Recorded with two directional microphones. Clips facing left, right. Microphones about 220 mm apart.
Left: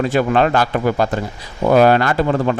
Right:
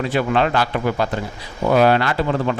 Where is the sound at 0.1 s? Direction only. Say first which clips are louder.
Left 3 dB; 45° left (ahead or behind).